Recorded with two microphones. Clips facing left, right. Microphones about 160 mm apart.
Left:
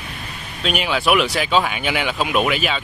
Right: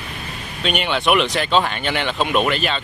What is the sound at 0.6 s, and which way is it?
Speech, centre (ahead or behind).